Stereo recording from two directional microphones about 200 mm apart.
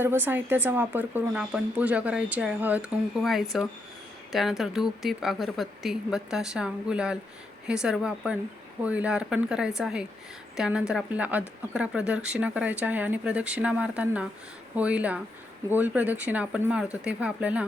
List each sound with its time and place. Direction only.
0.0 s speech: 10° right (ahead or behind)